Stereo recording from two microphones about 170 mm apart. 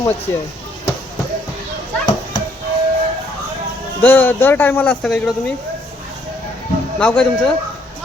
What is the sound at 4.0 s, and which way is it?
Speech, 10° left (ahead or behind).